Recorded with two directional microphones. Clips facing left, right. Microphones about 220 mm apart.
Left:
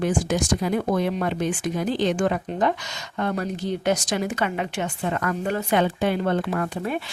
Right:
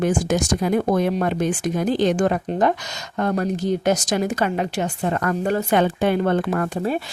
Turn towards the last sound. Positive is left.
turn(degrees=-50)  # may be behind; listen again after turning